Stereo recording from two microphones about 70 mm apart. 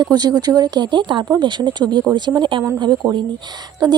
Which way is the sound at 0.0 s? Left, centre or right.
Right.